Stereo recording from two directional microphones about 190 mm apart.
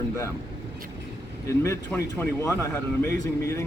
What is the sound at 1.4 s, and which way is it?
Speech, 15° left (ahead or behind).